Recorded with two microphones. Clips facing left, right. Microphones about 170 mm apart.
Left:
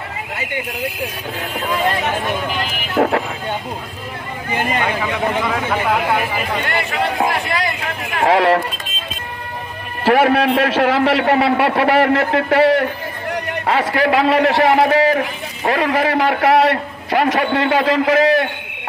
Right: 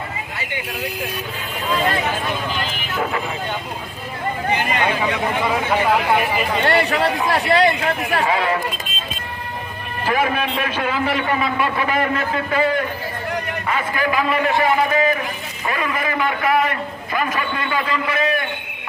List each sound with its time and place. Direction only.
3.0 s speech: 65° left (ahead or behind)
5.4 s speech: 5° right (ahead or behind)
6.7 s a man's voice: 35° right (ahead or behind)
8.3 s a man's voice: 80° left
10.0 s a man's voice: 75° left (ahead or behind)
15.1 s a man's voice: 70° left (ahead or behind); by 18.5 s 90° left